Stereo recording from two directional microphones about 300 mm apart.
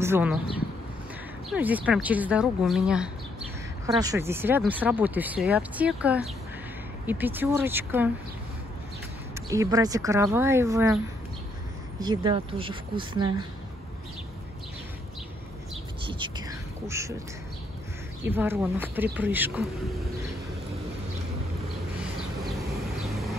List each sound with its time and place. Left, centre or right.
0.0 s speech: centre
1.5 s speech: centre
9.5 s speech: centre
12.0 s speech: centre
16.1 s whispering: centre
18.2 s speech: centre